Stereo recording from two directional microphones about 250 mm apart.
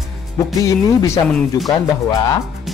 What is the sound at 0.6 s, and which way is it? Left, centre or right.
Speech, centre.